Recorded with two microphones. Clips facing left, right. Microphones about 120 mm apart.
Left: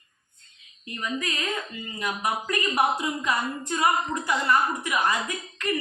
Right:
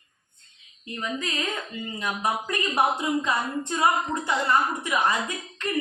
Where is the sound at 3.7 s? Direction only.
25° right (ahead or behind).